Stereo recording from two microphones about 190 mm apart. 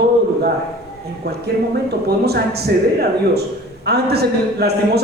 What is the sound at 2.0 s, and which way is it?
Speech, 55° right (ahead or behind).